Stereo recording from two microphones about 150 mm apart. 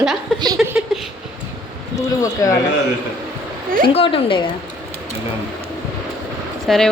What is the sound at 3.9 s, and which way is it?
Speech, 40° left (ahead or behind).